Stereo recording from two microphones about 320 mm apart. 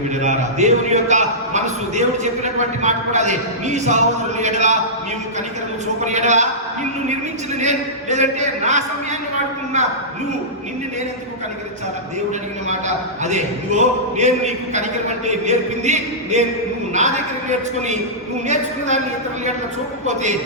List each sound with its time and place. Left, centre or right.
0.2 s a man's voice: right
6.1 s a man's voice: right
7.6 s a man's voice: right
13.2 s a man's voice: right
18.4 s a man's voice: right